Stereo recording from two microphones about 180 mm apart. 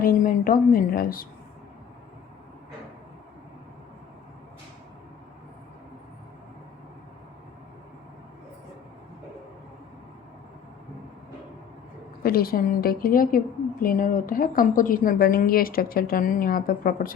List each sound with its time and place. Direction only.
0.0 s a woman's voice: 50° left (ahead or behind)
12.2 s a woman's voice: 55° left (ahead or behind)